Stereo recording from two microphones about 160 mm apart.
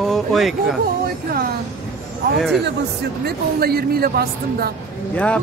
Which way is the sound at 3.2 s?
75° right (ahead or behind).